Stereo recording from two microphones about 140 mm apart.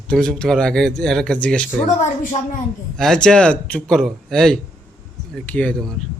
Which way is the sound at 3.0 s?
5° left (ahead or behind).